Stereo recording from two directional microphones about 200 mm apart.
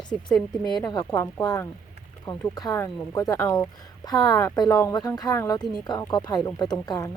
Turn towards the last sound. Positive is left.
turn(degrees=20)  # may be behind; listen again after turning